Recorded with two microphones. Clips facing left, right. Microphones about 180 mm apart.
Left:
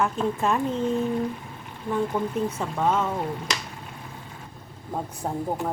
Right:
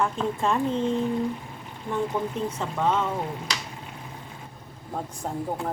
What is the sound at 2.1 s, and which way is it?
Speech, 5° left (ahead or behind).